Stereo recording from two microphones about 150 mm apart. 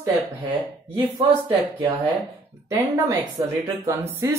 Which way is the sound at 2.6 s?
20° right (ahead or behind).